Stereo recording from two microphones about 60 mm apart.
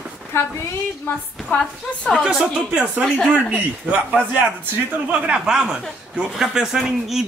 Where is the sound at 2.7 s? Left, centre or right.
Centre.